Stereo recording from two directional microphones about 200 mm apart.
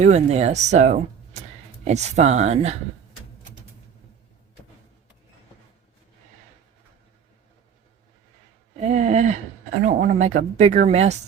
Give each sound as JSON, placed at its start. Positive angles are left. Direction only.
{"t": 0.0, "sound": "speech", "side_deg": -35}
{"t": 8.8, "sound": "speech", "side_deg": -35}